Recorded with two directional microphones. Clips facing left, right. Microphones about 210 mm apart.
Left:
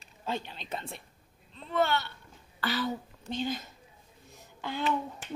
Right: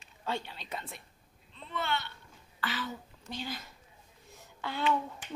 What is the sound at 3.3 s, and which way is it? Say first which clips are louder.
Speech: left 7 dB; 20° left (ahead or behind).